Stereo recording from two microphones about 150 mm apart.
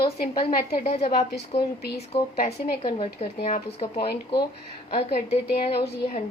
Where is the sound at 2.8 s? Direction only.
35° left (ahead or behind).